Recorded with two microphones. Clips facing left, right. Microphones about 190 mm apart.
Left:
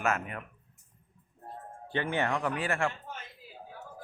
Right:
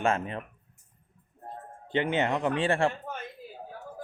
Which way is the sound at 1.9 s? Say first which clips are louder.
Right 4 dB; 20° right (ahead or behind).